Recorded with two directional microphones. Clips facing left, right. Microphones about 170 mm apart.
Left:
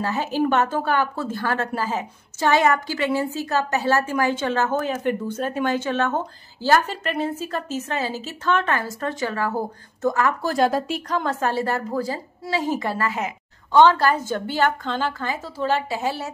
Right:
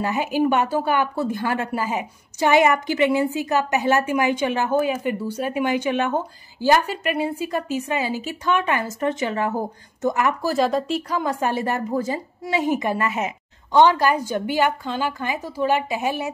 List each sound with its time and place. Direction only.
0.0 s a woman's voice: 15° right (ahead or behind)
10.4 s a woman's voice: centre (ahead or behind); by 16.3 s 20° right (ahead or behind)